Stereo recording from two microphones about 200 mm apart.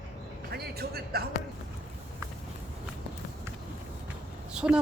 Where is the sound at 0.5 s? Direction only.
50° right (ahead or behind).